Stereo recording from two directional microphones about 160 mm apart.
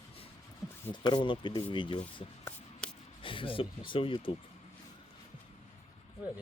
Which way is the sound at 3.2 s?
35° left (ahead or behind).